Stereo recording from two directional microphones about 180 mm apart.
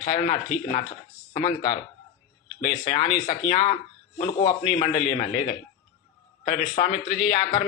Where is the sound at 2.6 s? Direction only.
30° left (ahead or behind).